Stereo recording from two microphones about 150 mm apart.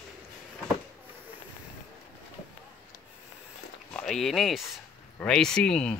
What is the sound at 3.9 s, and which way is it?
Speech, centre (ahead or behind).